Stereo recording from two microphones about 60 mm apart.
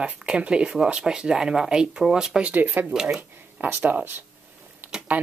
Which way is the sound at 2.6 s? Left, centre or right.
Right.